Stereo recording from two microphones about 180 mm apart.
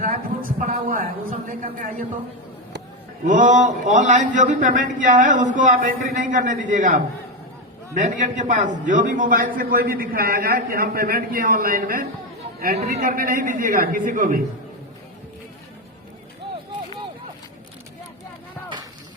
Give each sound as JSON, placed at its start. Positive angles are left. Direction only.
{"t": 0.0, "sound": "a man's voice", "side_deg": -45}
{"t": 3.2, "sound": "a man's voice", "side_deg": -45}